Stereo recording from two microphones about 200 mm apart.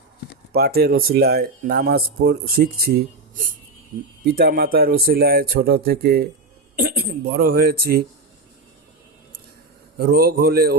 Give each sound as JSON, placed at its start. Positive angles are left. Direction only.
{"t": 0.5, "sound": "speech", "side_deg": -50}
{"t": 4.2, "sound": "speech", "side_deg": -50}
{"t": 10.0, "sound": "speech", "side_deg": -50}